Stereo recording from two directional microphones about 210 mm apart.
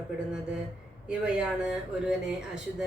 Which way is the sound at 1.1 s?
5° right (ahead or behind).